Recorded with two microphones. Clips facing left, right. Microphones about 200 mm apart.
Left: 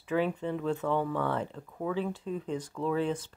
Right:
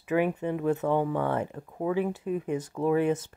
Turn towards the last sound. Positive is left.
turn(degrees=-60)  # may be behind; listen again after turning